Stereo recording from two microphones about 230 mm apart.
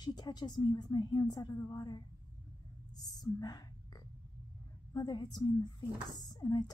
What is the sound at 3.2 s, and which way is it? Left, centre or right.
Whispering, centre.